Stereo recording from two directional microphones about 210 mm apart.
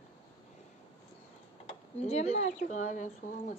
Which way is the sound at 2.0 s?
30° left (ahead or behind).